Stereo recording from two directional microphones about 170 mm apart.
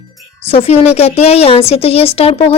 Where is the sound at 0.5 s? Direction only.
35° left (ahead or behind).